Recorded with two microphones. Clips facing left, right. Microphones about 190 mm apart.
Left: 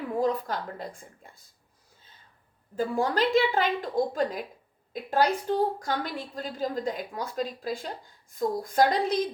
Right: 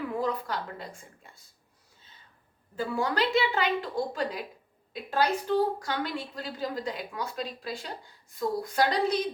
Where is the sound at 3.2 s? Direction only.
45° left (ahead or behind).